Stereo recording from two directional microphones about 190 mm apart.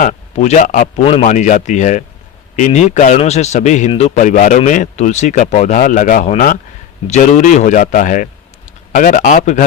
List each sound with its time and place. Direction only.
0.0 s a man's voice: 40° left (ahead or behind)